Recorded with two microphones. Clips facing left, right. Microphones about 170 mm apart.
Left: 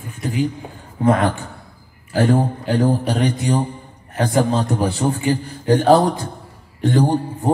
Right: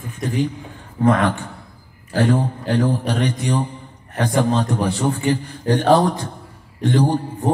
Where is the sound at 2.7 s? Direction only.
35° left (ahead or behind).